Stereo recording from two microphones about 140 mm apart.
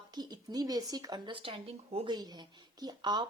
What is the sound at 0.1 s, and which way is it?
Speech, 30° right (ahead or behind).